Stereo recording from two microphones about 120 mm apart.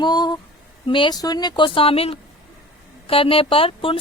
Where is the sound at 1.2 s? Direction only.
35° left (ahead or behind).